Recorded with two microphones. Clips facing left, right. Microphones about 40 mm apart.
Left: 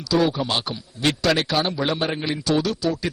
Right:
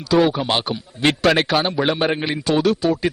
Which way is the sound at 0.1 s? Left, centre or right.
Right.